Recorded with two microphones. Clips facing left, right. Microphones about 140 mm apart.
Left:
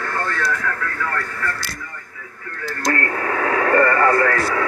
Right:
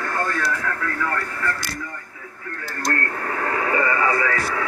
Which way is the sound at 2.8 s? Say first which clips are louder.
Left 4 dB; 85° left.